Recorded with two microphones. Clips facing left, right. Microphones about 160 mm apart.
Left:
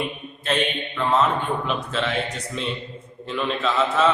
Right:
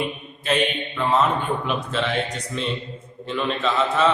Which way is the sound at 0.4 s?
Centre (ahead or behind).